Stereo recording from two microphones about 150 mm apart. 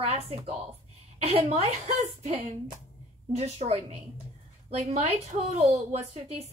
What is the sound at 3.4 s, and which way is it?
A woman's voice, 45° right (ahead or behind).